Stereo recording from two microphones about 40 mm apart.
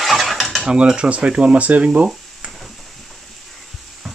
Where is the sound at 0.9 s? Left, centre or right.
Right.